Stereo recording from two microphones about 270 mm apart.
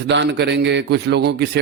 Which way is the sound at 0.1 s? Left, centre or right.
Right.